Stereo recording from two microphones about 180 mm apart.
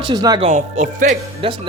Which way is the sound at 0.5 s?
45° right (ahead or behind).